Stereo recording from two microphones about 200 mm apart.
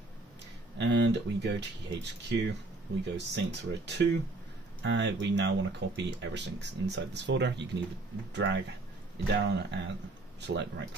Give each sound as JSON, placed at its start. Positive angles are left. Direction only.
{"t": 0.7, "sound": "speech", "side_deg": -60}